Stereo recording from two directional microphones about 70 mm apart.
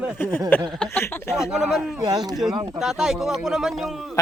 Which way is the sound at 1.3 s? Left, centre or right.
Centre.